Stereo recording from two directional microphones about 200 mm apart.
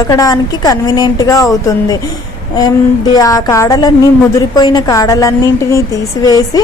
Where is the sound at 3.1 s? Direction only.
15° left (ahead or behind).